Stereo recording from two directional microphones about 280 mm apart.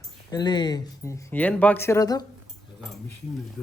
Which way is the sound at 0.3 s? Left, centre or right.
Centre.